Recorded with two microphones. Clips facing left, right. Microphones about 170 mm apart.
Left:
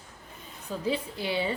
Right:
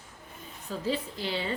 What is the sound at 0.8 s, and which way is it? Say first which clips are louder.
Speech: left 2 dB; 15° left (ahead or behind).